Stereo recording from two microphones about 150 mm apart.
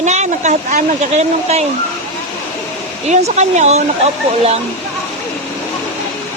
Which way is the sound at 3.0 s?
50° right (ahead or behind).